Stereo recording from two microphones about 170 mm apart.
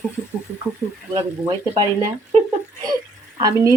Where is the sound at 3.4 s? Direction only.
20° right (ahead or behind).